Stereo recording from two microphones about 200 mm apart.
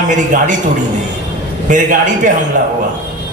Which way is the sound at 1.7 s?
40° right (ahead or behind).